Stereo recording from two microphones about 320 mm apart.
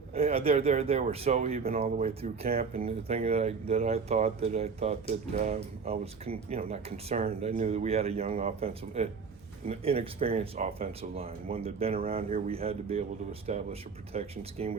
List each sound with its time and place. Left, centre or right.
0.1 s speech: centre